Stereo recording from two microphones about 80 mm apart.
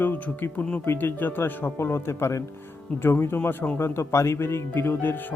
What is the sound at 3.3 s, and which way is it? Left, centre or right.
Speech, centre.